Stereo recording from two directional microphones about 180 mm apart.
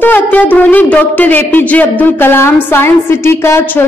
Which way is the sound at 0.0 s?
10° left (ahead or behind).